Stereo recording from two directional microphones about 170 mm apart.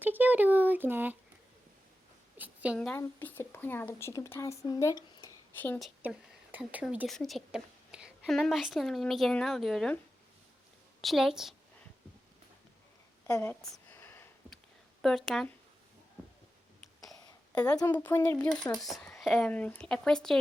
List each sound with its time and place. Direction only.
0.0 s speech: 10° right (ahead or behind)
2.4 s a woman's voice: 10° right (ahead or behind)
2.7 s a woman's voice: 5° left (ahead or behind)
5.8 s a woman's voice: 10° right (ahead or behind)
11.0 s a woman's voice: centre (ahead or behind)
13.2 s a sound: 15° left (ahead or behind)
15.0 s a woman's voice: centre (ahead or behind)
17.7 s a woman's voice: 25° left (ahead or behind); by 20.4 s 5° left (ahead or behind)